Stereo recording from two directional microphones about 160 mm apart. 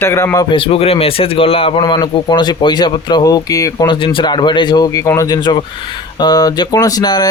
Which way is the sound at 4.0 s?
30° left (ahead or behind).